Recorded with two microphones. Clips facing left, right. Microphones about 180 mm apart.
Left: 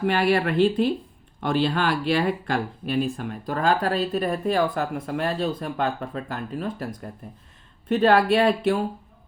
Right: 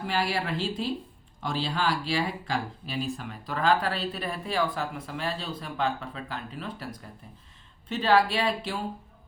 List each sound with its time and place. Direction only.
0.0 s speech: 60° left (ahead or behind)